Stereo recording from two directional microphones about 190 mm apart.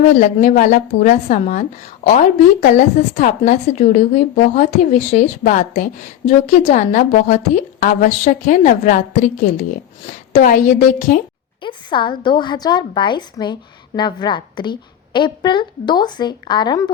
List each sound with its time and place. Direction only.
0.2 s a woman's voice: 40° left (ahead or behind)
10.3 s a woman's voice: 45° left (ahead or behind)
11.6 s speech: 25° left (ahead or behind)